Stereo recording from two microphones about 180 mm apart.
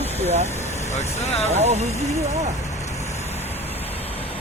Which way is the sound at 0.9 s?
40° left (ahead or behind).